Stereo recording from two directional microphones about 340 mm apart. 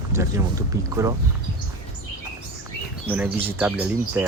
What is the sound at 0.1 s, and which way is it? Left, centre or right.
Speech, centre.